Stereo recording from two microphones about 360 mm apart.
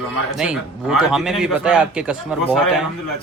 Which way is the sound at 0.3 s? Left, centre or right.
Centre.